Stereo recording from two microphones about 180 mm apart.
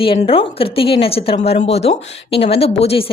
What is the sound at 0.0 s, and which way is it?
A woman's voice, 30° left (ahead or behind).